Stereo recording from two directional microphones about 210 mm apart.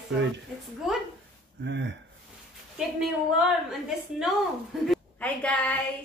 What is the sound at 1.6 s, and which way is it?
Speech, 55° right (ahead or behind).